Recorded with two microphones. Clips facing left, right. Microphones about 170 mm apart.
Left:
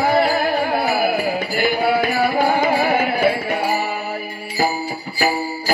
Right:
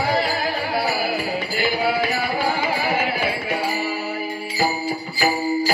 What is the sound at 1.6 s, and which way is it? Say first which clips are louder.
Music: left 3 dB; 50° left (ahead or behind).